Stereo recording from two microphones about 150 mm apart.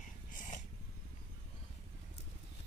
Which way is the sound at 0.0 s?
55° left (ahead or behind).